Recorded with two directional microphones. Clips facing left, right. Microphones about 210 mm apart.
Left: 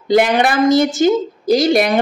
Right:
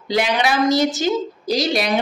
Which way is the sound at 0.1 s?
50° left (ahead or behind).